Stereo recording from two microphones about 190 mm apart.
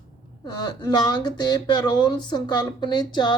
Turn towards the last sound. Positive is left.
turn(degrees=20)  # may be behind; listen again after turning